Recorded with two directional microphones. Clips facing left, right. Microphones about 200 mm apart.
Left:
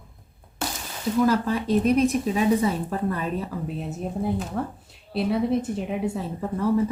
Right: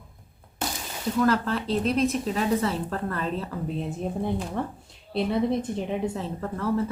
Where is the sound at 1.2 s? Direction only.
10° left (ahead or behind).